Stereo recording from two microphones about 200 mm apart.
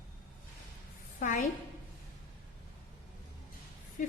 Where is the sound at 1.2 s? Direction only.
40° left (ahead or behind).